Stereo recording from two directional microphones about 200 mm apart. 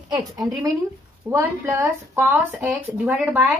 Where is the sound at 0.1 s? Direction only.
20° right (ahead or behind).